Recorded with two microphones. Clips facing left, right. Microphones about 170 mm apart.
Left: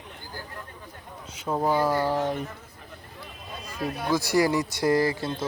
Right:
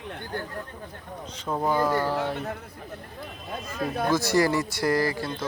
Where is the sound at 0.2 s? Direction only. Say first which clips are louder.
Right 7 dB; 65° right (ahead or behind).